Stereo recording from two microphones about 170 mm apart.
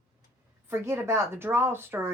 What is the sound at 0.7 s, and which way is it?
Speech, 15° right (ahead or behind).